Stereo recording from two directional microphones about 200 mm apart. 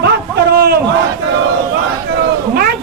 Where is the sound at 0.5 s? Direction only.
50° right (ahead or behind).